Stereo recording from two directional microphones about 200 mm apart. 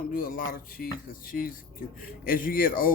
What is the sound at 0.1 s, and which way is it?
Speech, 45° left (ahead or behind).